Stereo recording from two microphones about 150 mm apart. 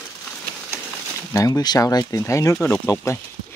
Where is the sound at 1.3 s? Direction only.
25° left (ahead or behind).